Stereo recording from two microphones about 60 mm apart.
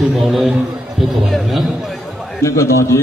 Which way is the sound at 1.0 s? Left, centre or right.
Centre.